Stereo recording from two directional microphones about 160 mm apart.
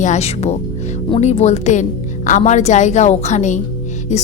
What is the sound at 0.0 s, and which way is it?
A woman's voice, 45° left (ahead or behind).